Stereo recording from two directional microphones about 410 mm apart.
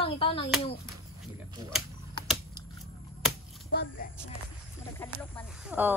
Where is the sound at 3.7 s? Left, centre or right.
Left.